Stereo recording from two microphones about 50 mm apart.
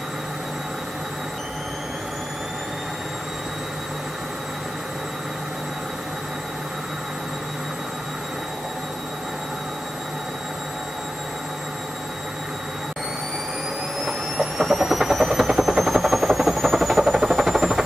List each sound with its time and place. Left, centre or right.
14.0 s vehicle: centre